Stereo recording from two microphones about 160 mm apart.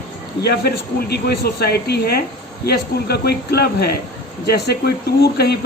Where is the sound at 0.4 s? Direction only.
90° left.